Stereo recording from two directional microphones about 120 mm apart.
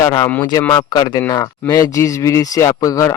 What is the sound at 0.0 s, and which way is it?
Speech, 25° left (ahead or behind).